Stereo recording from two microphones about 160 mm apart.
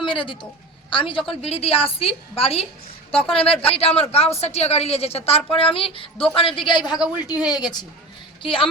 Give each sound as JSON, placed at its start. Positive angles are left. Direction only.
{"t": 0.0, "sound": "a man's voice", "side_deg": 30}
{"t": 6.9, "sound": "speech", "side_deg": -5}
{"t": 7.4, "sound": "a woman's voice", "side_deg": 25}